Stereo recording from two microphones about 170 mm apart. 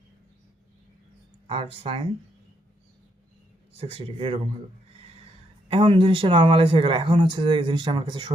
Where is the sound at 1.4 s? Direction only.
30° right (ahead or behind).